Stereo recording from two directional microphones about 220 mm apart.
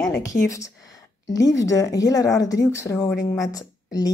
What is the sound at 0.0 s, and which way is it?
Speech, 15° left (ahead or behind).